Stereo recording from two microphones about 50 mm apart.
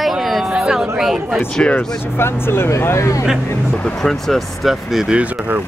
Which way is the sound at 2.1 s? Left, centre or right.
Left.